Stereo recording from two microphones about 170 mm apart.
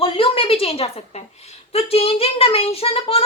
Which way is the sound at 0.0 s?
35° left (ahead or behind).